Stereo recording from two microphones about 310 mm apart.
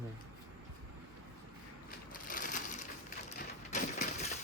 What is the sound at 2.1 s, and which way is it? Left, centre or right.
Crushing, left.